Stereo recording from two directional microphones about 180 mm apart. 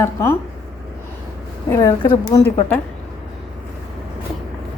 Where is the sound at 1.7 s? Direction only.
15° left (ahead or behind).